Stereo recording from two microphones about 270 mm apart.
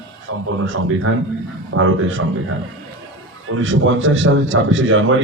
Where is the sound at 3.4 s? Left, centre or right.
Right.